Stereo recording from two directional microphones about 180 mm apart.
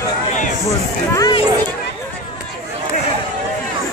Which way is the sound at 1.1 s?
20° left (ahead or behind).